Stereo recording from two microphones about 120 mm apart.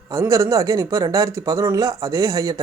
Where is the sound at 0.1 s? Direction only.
25° right (ahead or behind).